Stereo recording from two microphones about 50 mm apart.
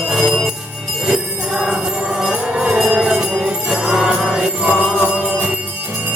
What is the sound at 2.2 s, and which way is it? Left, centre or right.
Music, centre.